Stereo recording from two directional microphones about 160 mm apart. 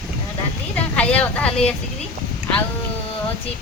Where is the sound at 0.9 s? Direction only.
10° left (ahead or behind).